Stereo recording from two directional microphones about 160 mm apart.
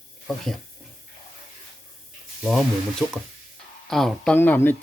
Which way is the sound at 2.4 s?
Centre (ahead or behind).